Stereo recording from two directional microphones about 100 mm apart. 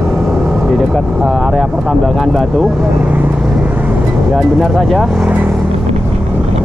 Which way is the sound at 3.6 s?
15° right (ahead or behind).